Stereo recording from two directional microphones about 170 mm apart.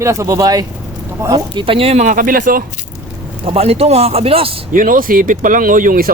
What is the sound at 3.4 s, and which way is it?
Speech, 35° right (ahead or behind).